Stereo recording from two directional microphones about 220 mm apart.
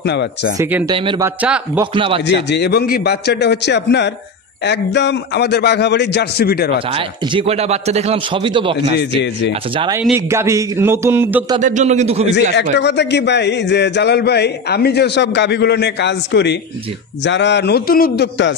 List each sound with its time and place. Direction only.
0.0 s a man's voice: 50° left (ahead or behind)
0.6 s speech: 10° right (ahead or behind)
0.8 s a man's voice: 20° right (ahead or behind)
1.4 s speech: 5° right (ahead or behind)
2.0 s a man's voice: 25° right (ahead or behind)
2.2 s a man's voice: 50° left (ahead or behind)
6.9 s a man's voice: 25° right (ahead or behind)
8.9 s a man's voice: 50° left (ahead or behind)
9.5 s a man's voice: 25° right (ahead or behind)
10.0 s speech: 10° right (ahead or behind)
11.6 s a man's voice: 35° right (ahead or behind)
12.7 s a man's voice: 50° left (ahead or behind)